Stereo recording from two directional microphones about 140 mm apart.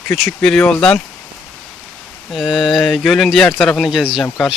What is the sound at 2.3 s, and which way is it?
Speech, centre (ahead or behind).